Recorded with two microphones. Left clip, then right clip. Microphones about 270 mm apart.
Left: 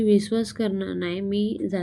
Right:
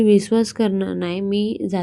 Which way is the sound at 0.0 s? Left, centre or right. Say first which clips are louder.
Right 6 dB; centre.